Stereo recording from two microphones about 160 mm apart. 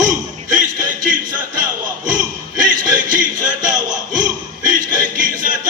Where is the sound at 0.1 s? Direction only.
50° right (ahead or behind).